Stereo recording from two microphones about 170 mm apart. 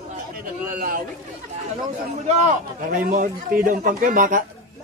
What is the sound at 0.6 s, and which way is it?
Speech, 55° right (ahead or behind).